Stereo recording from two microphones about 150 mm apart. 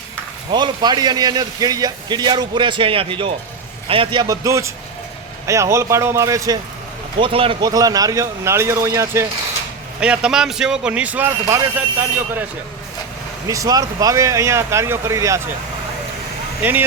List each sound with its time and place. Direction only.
0.5 s a man's voice: 30° right (ahead or behind)
7.2 s speech: 40° right (ahead or behind)
7.7 s a man's voice: 25° right (ahead or behind)
10.0 s speech: 5° right (ahead or behind)
13.5 s a man's voice: 25° right (ahead or behind)